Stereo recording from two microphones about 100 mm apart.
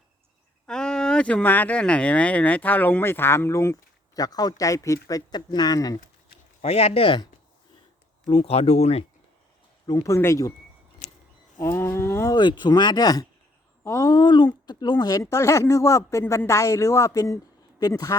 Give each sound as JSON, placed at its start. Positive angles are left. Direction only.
{"t": 0.7, "sound": "speech", "side_deg": 5}
{"t": 4.2, "sound": "speech", "side_deg": 40}
{"t": 6.6, "sound": "speech", "side_deg": 90}
{"t": 8.3, "sound": "speech", "side_deg": 80}
{"t": 9.8, "sound": "speech", "side_deg": 35}
{"t": 10.2, "sound": "livestock", "side_deg": 30}
{"t": 11.6, "sound": "livestock", "side_deg": 25}
{"t": 12.3, "sound": "speech", "side_deg": 50}
{"t": 15.2, "sound": "speech", "side_deg": 30}